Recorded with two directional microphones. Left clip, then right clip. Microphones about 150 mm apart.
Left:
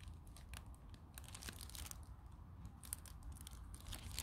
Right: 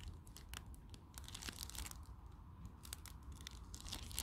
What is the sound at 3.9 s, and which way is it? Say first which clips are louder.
Crunch: right 4 dB; 15° right (ahead or behind).